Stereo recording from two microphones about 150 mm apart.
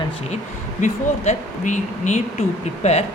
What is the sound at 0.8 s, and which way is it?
Speech, 55° left (ahead or behind).